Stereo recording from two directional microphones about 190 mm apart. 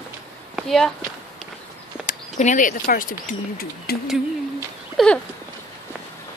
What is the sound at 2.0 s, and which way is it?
Speech, 40° left (ahead or behind).